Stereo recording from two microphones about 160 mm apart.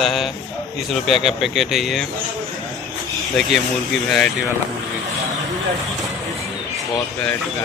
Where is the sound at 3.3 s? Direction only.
Centre (ahead or behind).